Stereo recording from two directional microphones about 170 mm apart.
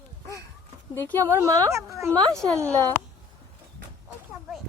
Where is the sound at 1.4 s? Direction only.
20° right (ahead or behind).